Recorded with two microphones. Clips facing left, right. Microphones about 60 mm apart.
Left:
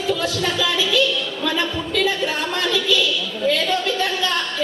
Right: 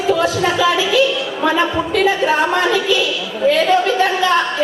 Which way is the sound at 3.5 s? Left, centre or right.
Right.